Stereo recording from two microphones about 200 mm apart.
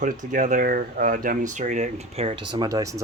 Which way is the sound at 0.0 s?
40° right (ahead or behind).